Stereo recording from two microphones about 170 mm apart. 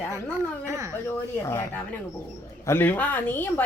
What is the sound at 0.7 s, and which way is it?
Speech, 20° right (ahead or behind).